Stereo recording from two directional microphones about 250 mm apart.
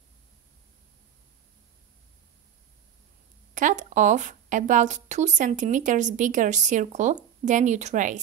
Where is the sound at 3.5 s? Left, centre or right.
Right.